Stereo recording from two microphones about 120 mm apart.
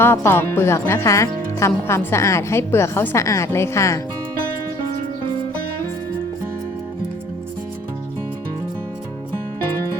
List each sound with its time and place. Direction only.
0.0 s speech: 20° left (ahead or behind)